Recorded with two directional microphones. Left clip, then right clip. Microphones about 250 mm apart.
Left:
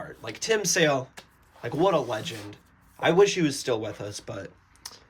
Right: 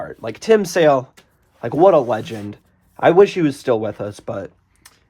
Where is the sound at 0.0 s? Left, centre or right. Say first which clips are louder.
Right 8 dB; centre.